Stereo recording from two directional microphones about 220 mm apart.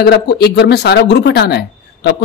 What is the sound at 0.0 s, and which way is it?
Speech, 50° left (ahead or behind).